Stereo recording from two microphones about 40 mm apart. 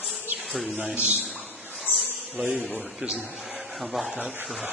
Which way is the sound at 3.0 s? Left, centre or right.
Right.